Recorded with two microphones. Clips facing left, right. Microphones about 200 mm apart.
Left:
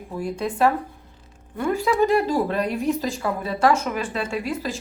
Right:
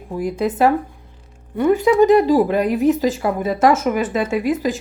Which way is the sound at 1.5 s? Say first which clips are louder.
Right 7 dB; 20° right (ahead or behind).